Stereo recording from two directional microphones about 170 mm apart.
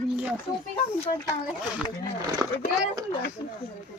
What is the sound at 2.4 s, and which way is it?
Speech, 15° right (ahead or behind).